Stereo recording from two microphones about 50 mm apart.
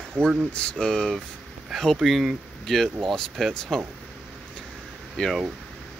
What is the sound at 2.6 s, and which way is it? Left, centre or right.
Speech, centre.